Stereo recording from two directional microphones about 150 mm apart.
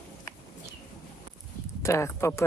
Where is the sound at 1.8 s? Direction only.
20° left (ahead or behind).